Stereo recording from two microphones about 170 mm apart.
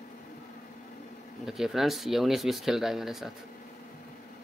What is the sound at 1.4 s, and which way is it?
Speech, centre (ahead or behind).